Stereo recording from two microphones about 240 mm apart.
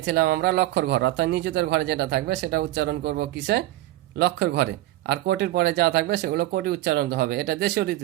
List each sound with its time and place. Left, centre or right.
0.0 s speech: right